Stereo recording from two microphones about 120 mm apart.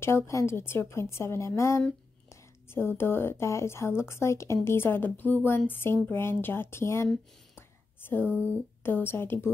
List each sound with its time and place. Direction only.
0.0 s speech: 25° left (ahead or behind)
8.8 s speech: 20° left (ahead or behind)